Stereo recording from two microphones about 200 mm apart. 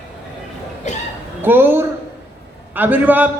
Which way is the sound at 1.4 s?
10° right (ahead or behind).